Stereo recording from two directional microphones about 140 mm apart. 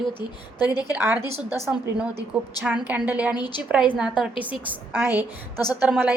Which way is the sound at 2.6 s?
10° right (ahead or behind).